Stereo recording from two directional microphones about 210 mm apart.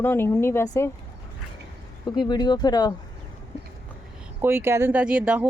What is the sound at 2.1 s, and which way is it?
Speech, 20° left (ahead or behind).